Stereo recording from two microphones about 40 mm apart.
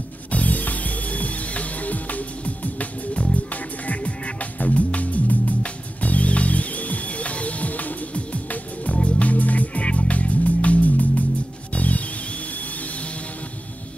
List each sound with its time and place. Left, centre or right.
0.3 s music: left